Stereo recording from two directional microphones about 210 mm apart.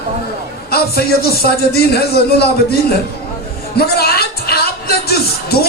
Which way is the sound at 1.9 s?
50° left (ahead or behind).